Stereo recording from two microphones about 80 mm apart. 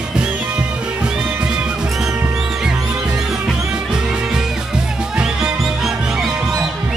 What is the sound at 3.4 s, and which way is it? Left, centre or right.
Music, centre.